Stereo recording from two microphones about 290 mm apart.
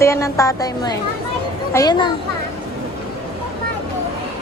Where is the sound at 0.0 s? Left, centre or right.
Centre.